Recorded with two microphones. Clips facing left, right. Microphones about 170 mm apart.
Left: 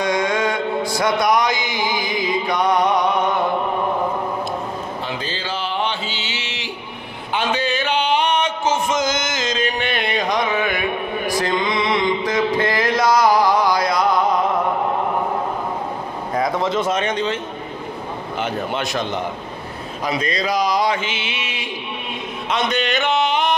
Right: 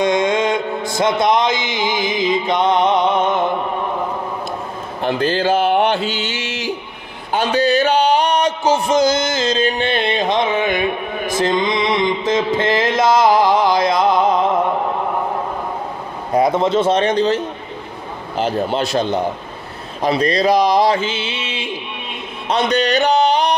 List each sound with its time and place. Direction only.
0.0 s mantra: 25° right (ahead or behind)
0.9 s music: 25° right (ahead or behind)
5.0 s a sound: 55° right (ahead or behind)
7.3 s music: 40° right (ahead or behind); by 10.8 s 25° right (ahead or behind)
11.2 s a sound: 25° right (ahead or behind)
16.3 s speech: 30° right (ahead or behind)
18.4 s speech: 30° right (ahead or behind)
22.5 s music: 35° right (ahead or behind)